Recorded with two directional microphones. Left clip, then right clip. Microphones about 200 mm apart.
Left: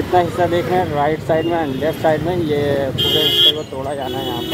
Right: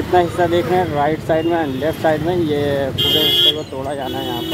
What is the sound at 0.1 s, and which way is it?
Speech, centre (ahead or behind).